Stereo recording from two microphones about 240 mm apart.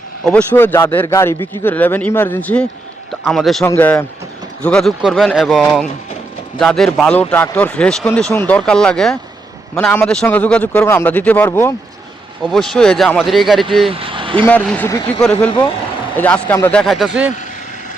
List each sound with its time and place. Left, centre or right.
0.3 s speech: centre
13.9 s vehicle: right
14.4 s speech: centre
15.4 s speech: left
16.1 s speech: centre